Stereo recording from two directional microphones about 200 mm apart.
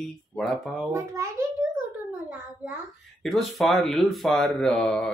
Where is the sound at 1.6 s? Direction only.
15° right (ahead or behind).